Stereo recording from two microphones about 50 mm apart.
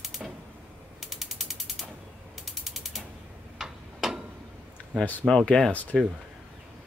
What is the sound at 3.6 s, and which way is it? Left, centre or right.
Tick-tock, centre.